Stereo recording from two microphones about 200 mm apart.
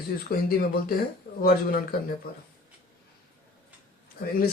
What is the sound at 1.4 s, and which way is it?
Speech, 45° left (ahead or behind).